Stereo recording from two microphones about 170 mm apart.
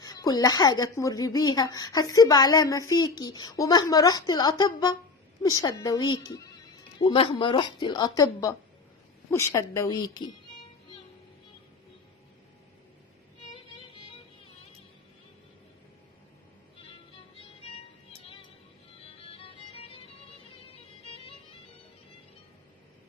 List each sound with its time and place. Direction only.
0.0 s a woman's voice: 20° left (ahead or behind)
16.8 s music: 35° left (ahead or behind)